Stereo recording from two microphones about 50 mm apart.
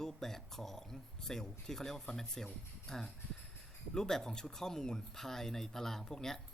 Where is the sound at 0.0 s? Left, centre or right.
Centre.